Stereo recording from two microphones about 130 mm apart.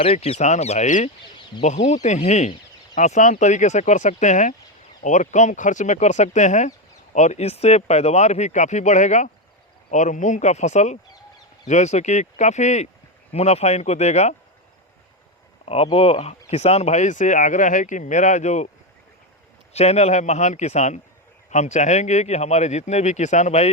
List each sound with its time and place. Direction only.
0.0 s speech: 50° left (ahead or behind)
2.9 s speech: 75° left (ahead or behind)
15.6 s speech: 50° left (ahead or behind)
19.7 s speech: 55° left (ahead or behind)